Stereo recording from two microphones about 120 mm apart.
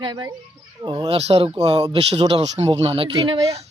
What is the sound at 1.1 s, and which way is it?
Speech, 55° right (ahead or behind).